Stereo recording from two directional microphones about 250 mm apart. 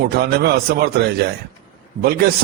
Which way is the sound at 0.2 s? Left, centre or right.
Right.